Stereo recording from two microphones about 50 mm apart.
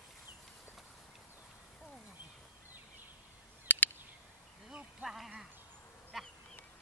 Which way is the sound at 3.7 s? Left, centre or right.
Left.